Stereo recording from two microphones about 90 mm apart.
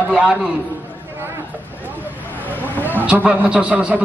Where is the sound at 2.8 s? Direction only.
20° right (ahead or behind).